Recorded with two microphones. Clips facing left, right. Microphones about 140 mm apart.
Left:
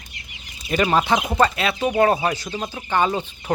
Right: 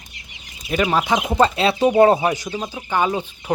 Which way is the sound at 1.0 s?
15° right (ahead or behind).